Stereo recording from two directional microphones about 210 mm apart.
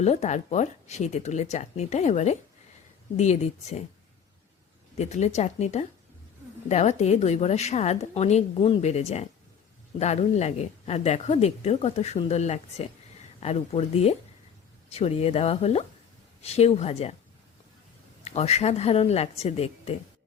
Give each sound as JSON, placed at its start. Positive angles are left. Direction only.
{"t": 0.0, "sound": "speech", "side_deg": 30}
{"t": 4.9, "sound": "a woman's voice", "side_deg": 30}
{"t": 18.3, "sound": "a woman's voice", "side_deg": 30}